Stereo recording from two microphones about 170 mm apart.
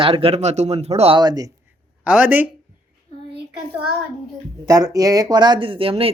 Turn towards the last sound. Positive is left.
turn(degrees=-35)  # may be behind; listen again after turning